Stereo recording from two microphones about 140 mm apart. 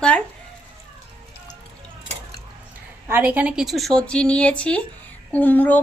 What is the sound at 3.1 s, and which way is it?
A woman's voice, 15° right (ahead or behind).